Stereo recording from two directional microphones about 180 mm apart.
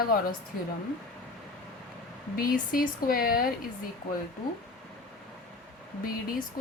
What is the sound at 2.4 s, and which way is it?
A woman's voice, 50° left (ahead or behind).